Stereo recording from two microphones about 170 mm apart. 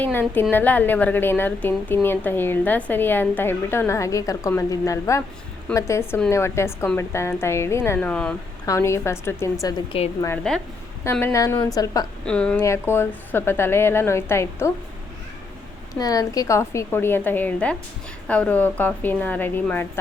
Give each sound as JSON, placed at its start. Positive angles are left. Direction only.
{"t": 0.0, "sound": "a woman's voice", "side_deg": 10}
{"t": 8.6, "sound": "a woman's voice", "side_deg": 15}
{"t": 12.2, "sound": "a woman's voice", "side_deg": 5}
{"t": 16.0, "sound": "a woman's voice", "side_deg": 20}